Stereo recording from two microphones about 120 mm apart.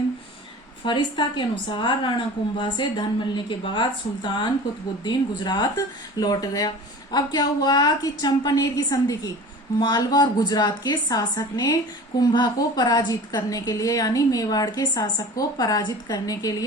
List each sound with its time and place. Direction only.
0.9 s a woman's voice: 40° left (ahead or behind)